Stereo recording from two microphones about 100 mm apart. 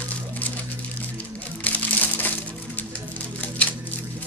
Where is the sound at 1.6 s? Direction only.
15° left (ahead or behind).